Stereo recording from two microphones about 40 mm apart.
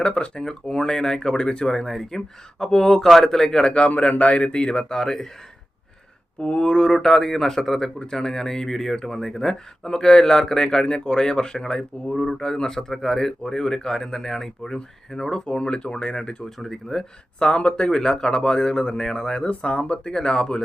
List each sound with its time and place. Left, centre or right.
0.0 s speech: left
0.3 s speech: centre
1.7 s speech: centre
3.7 s speech: left
4.8 s speech: centre
6.4 s speech: left; by 7.9 s centre
7.9 s speech: centre
15.4 s speech: left
16.6 s speech: centre
17.4 s speech: left